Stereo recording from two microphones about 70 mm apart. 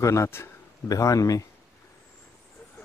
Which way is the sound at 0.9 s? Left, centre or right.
Left.